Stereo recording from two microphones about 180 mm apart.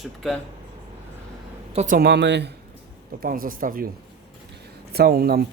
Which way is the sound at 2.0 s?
65° right (ahead or behind).